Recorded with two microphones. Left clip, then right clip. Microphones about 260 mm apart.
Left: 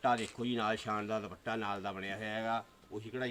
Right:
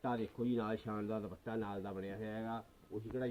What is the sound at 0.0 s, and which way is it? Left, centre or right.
Speech, centre.